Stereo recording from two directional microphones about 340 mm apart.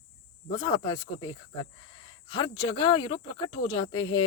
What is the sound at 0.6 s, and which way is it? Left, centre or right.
Speech, centre.